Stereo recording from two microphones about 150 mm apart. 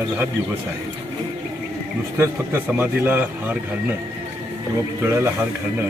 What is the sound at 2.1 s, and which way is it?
A man's voice, 15° right (ahead or behind).